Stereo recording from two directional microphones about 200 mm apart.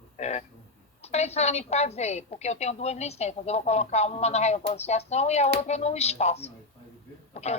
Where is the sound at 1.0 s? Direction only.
30° left (ahead or behind).